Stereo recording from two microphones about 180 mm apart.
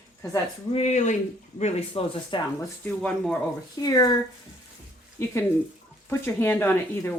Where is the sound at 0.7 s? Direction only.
40° left (ahead or behind).